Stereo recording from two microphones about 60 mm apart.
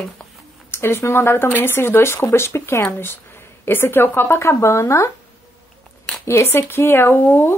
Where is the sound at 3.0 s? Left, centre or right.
Left.